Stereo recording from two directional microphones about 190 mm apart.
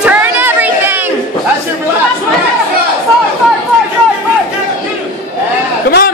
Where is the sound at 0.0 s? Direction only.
10° right (ahead or behind).